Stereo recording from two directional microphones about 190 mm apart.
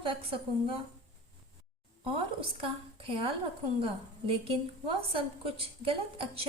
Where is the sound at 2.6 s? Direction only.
30° right (ahead or behind).